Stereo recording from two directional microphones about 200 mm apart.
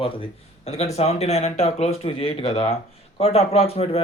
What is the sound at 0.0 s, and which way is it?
Speech, 25° left (ahead or behind).